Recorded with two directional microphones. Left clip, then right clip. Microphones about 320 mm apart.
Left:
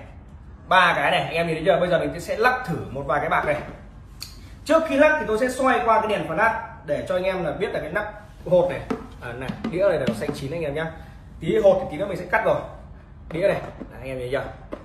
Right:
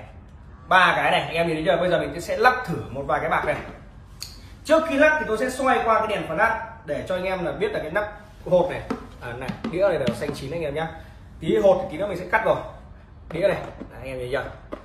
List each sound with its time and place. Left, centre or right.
0.7 s a man's voice: centre
12.0 s a man's voice: centre